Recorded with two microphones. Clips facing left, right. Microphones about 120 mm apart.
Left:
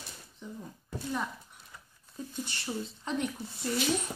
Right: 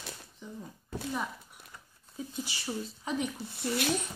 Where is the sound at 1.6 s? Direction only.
60° right (ahead or behind).